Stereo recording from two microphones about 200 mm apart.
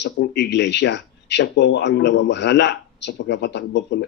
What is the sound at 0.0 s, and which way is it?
Speech, 55° left (ahead or behind).